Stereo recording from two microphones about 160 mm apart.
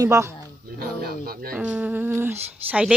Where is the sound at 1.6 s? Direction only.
10° right (ahead or behind).